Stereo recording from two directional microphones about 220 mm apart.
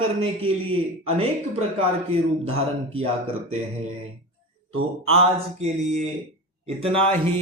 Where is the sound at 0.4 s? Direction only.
25° right (ahead or behind).